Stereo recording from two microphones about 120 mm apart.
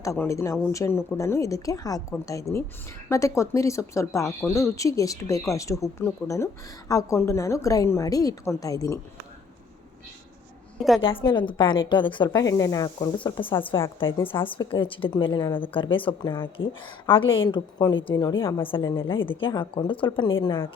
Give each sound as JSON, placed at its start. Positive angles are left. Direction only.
{"t": 0.0, "sound": "speech", "side_deg": 25}
{"t": 11.0, "sound": "a woman's voice", "side_deg": 45}
{"t": 13.1, "sound": "a woman's voice", "side_deg": 40}
{"t": 18.0, "sound": "a woman's voice", "side_deg": 35}